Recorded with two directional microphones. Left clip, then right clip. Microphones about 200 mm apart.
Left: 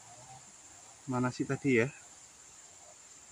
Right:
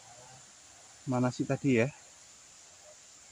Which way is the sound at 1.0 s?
30° right (ahead or behind).